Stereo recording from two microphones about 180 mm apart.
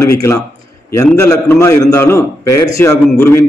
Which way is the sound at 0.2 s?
15° left (ahead or behind).